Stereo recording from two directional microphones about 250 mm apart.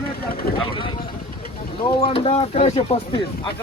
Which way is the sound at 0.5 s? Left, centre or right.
Centre.